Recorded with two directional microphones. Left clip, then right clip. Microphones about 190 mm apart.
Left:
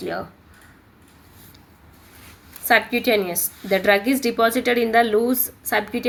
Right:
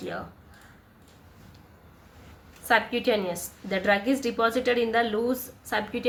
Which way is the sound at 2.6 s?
35° left (ahead or behind).